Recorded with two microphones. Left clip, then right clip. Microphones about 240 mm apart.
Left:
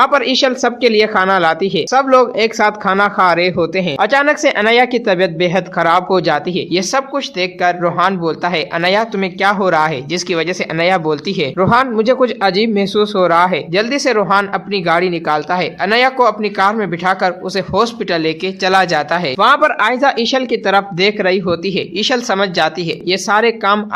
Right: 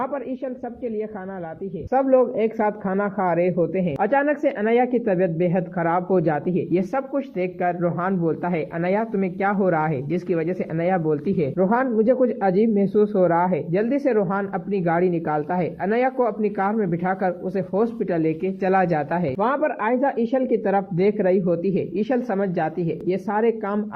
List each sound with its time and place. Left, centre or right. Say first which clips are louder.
0.0 s speech: left 16 dB; left
12.5 s speech: left 5 dB; left
13.2 s speech: left 8 dB; centre
21.6 s speech: left 5 dB; left
22.0 s speech: left 11 dB; centre